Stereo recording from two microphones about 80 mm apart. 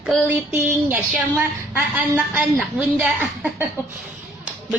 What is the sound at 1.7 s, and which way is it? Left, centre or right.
A woman's voice, centre.